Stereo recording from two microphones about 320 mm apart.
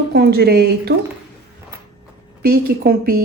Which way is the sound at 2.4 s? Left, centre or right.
Right.